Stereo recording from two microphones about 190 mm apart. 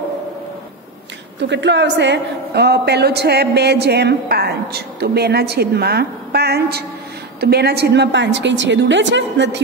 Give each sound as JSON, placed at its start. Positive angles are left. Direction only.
{"t": 1.4, "sound": "a woman's voice", "side_deg": -65}